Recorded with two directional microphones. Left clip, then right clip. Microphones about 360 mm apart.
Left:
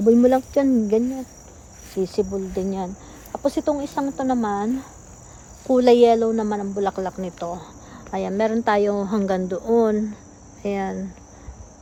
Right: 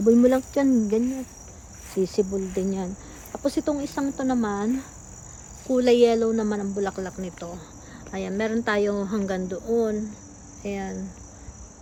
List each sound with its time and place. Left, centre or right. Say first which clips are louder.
0.0 s speech: left 3 dB; centre